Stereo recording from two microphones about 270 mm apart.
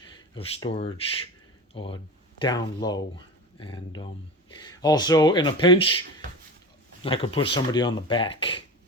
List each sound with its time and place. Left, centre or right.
0.3 s speech: left
7.0 s speech: centre